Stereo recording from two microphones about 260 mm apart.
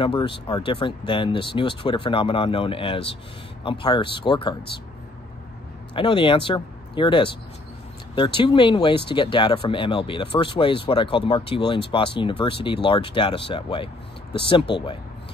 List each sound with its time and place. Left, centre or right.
0.0 s speech: centre
5.9 s speech: centre